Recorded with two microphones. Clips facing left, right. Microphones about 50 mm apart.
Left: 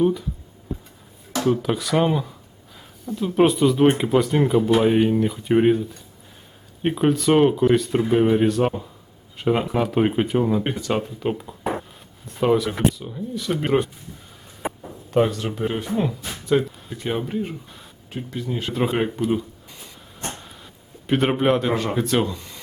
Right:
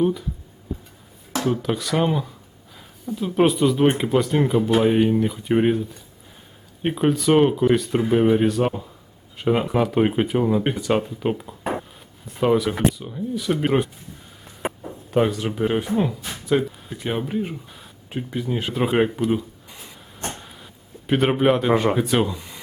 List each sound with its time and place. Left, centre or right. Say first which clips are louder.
0.0 s speech: left 1 dB; centre
1.5 s speech: left 2 dB; centre
15.1 s speech: even; centre
16.0 s speech: right 1 dB; centre
18.1 s speech: right 2 dB; centre
18.7 s speech: left 1 dB; centre
18.9 s a sound: right 2 dB; centre
21.1 s speech: right 1 dB; centre
21.7 s speech: right 5 dB; centre
21.9 s speech: right 1 dB; centre